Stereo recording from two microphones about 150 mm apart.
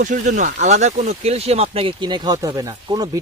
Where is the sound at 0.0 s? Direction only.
55° right (ahead or behind).